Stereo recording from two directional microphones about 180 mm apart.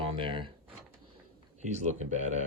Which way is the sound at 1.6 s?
40° right (ahead or behind).